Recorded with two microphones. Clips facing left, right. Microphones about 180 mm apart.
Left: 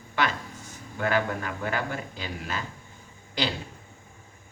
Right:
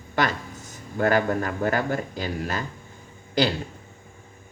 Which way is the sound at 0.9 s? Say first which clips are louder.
Right 5 dB; 40° right (ahead or behind).